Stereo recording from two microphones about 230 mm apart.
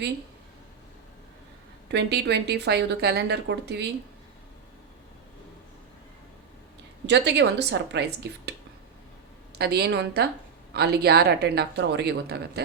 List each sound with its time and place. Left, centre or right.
1.9 s a woman's voice: right
7.1 s a woman's voice: right
9.6 s a woman's voice: right